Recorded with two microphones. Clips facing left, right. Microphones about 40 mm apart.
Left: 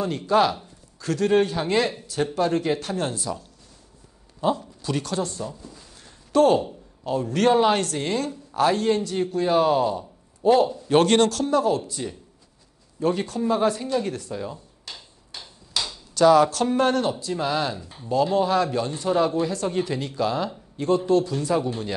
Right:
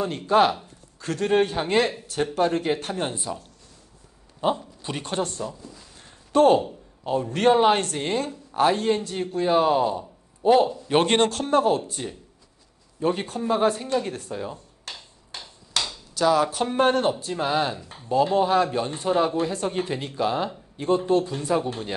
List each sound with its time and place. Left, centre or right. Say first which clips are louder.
0.3 s speech: right 1 dB; right
5.2 s speech: right 1 dB; right
5.9 s a sound: even; right
7.1 s a man's voice: even; right
13.0 s a man's voice: left 1 dB; right
14.9 s hammer: right 1 dB; right
16.2 s speech: left 5 dB; centre
16.4 s a man's voice: left 2 dB; centre
16.7 s a man's voice: right 1 dB; right
21.0 s speech: left 1 dB; right